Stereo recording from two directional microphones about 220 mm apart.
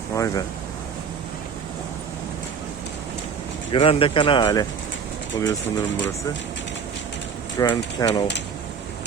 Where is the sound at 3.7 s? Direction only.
25° left (ahead or behind).